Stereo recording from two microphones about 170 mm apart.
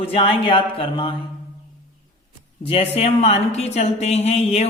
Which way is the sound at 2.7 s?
35° left (ahead or behind).